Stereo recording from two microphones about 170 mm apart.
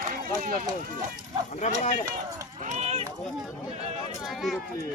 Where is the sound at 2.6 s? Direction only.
45° right (ahead or behind).